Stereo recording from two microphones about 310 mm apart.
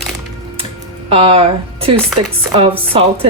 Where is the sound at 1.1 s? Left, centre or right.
Centre.